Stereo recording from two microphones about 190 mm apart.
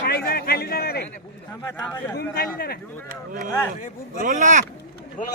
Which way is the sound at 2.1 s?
55° left (ahead or behind).